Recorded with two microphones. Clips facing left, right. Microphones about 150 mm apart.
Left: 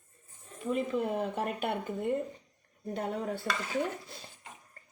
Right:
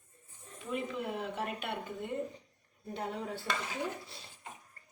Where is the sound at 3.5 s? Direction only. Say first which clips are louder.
Right 1 dB; 65° left (ahead or behind).